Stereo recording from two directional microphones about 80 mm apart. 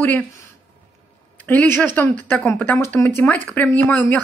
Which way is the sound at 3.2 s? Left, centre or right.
Left.